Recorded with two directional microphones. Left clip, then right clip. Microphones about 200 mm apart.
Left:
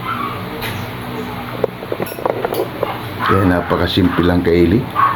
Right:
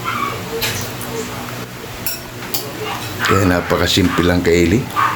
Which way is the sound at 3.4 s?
10° right (ahead or behind).